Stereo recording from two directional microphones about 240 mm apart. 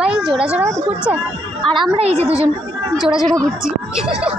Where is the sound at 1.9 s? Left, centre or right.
Right.